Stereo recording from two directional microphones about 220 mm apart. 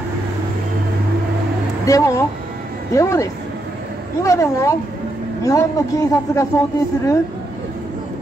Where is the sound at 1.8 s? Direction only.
15° left (ahead or behind).